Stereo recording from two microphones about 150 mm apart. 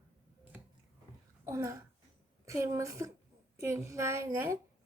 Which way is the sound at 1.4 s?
20° right (ahead or behind).